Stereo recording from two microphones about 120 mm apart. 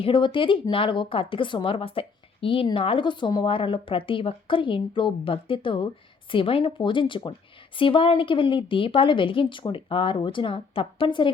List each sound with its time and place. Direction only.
0.0 s speech: 45° left (ahead or behind)